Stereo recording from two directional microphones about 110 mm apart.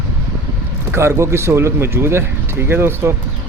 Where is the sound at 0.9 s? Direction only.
25° right (ahead or behind).